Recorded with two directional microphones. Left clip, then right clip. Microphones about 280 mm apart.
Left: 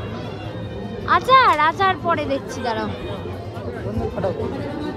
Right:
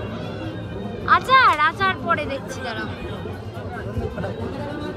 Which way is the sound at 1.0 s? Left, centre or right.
Centre.